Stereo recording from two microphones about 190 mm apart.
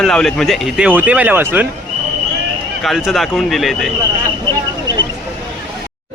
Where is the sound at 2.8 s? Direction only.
Centre (ahead or behind).